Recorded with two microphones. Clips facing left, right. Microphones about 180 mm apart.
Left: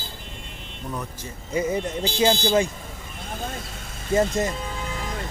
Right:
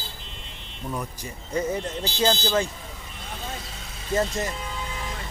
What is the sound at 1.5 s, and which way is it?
Speech, 10° left (ahead or behind).